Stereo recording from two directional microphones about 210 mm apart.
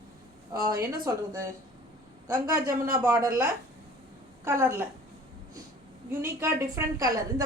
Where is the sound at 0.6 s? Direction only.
15° right (ahead or behind).